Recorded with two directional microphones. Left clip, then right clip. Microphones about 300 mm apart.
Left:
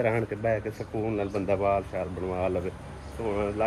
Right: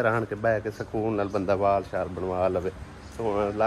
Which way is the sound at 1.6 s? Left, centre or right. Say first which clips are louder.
Right 2 dB; centre.